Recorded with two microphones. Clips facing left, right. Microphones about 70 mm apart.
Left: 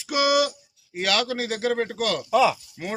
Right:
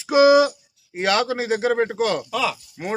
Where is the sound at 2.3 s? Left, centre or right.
Centre.